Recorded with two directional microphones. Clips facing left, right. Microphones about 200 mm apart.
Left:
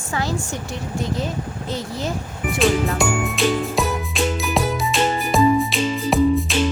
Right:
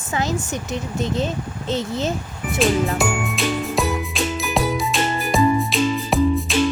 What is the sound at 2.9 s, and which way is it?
Jingle, centre (ahead or behind).